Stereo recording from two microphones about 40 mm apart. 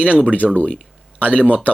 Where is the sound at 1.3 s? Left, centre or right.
Right.